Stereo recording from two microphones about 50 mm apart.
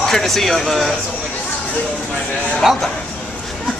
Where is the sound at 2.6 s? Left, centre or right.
Centre.